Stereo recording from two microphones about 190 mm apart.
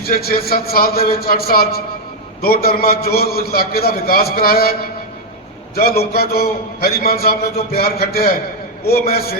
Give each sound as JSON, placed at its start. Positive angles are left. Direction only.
{"t": 0.0, "sound": "a man's voice", "side_deg": 55}